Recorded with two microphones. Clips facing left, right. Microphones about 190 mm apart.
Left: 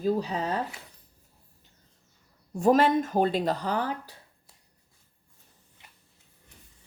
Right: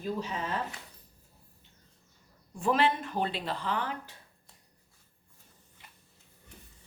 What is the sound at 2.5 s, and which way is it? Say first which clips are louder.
Speech: left 7 dB; 40° left (ahead or behind).